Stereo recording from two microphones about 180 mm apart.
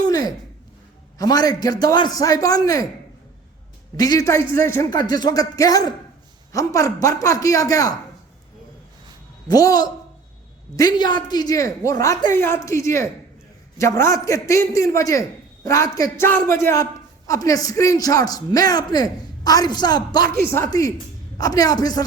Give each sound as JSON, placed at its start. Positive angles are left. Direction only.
{"t": 0.1, "sound": "a sound", "side_deg": 20}
{"t": 1.2, "sound": "a man's voice", "side_deg": 20}
{"t": 3.9, "sound": "a man's voice", "side_deg": 20}
{"t": 9.5, "sound": "a man's voice", "side_deg": 20}